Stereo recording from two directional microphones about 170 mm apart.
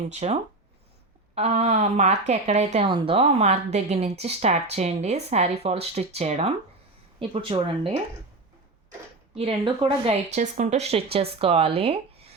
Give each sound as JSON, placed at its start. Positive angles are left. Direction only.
{"t": 0.1, "sound": "a woman's voice", "side_deg": -40}
{"t": 1.4, "sound": "a woman's voice", "side_deg": -40}
{"t": 2.8, "sound": "a woman's voice", "side_deg": -30}
{"t": 9.3, "sound": "a woman's voice", "side_deg": -35}